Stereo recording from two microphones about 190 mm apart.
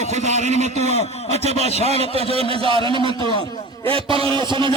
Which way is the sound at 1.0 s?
35° left (ahead or behind).